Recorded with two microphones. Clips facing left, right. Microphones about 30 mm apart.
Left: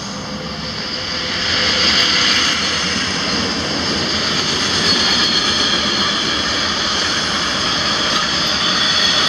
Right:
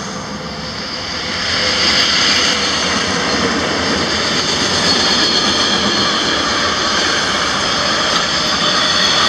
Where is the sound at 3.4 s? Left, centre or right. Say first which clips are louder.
Right 4 dB; right.